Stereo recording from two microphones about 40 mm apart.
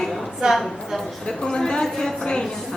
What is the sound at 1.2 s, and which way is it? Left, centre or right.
A woman's voice, centre.